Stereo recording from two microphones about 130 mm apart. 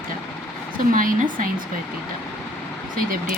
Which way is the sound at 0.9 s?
90° right.